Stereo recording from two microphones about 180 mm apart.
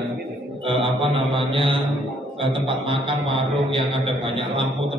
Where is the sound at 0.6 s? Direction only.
30° right (ahead or behind).